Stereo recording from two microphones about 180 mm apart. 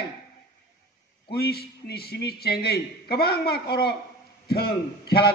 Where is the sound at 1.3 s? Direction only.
60° left (ahead or behind).